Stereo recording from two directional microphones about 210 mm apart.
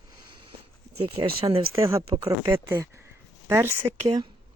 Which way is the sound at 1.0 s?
20° right (ahead or behind).